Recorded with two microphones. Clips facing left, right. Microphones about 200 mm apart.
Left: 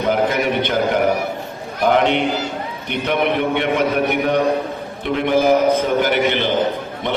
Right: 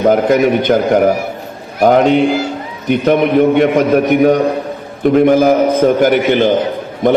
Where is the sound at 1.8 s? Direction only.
40° right (ahead or behind).